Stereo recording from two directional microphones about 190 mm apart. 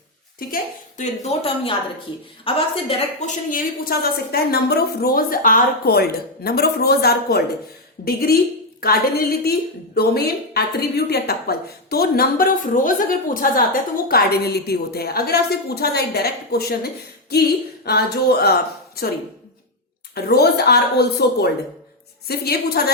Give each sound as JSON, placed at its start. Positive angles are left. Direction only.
{"t": 0.3, "sound": "a woman's voice", "side_deg": 45}
{"t": 3.2, "sound": "a woman's voice", "side_deg": 50}
{"t": 20.1, "sound": "a woman's voice", "side_deg": 55}